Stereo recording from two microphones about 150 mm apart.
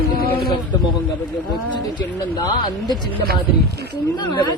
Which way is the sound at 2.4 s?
25° left (ahead or behind).